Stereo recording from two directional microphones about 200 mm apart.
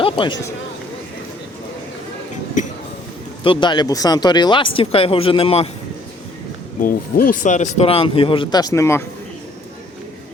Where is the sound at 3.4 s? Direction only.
25° left (ahead or behind).